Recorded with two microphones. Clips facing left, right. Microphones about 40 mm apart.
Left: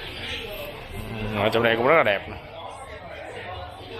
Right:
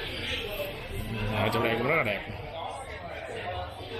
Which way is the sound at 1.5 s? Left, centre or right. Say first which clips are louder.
Left 9 dB; left.